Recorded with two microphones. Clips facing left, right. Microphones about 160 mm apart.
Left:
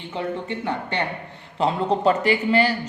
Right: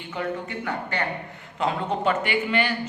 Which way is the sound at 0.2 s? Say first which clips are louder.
Left 2 dB; 25° left (ahead or behind).